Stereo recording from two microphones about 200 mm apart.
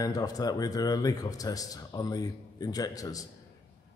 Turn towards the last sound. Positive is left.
turn(degrees=15)  # may be behind; listen again after turning